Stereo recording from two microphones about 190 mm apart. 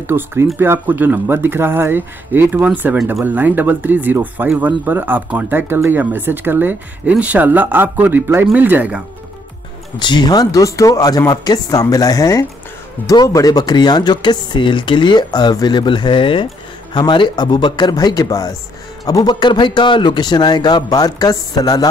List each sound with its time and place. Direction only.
0.0 s speech: 10° right (ahead or behind)
9.9 s speech: 25° left (ahead or behind)